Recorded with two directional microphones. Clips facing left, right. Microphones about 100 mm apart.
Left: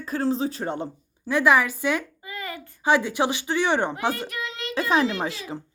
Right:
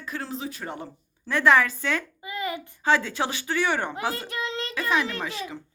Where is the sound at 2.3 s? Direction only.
20° right (ahead or behind).